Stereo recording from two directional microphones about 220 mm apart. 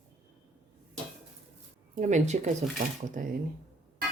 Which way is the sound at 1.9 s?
35° right (ahead or behind).